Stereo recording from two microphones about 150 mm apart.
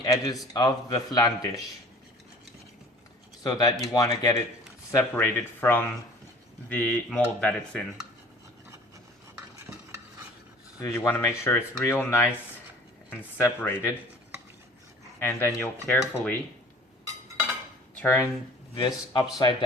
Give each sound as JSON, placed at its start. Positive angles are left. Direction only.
{"t": 0.0, "sound": "a man's voice", "side_deg": 25}
{"t": 3.4, "sound": "speech", "side_deg": 25}
{"t": 10.8, "sound": "speech", "side_deg": 20}
{"t": 15.2, "sound": "speech", "side_deg": 15}
{"t": 18.0, "sound": "speech", "side_deg": 15}
{"t": 18.8, "sound": "speech", "side_deg": 30}